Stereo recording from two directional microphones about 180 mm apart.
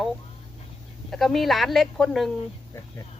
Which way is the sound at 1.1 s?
Centre (ahead or behind).